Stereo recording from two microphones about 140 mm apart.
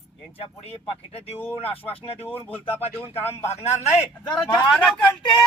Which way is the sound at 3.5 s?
50° left (ahead or behind).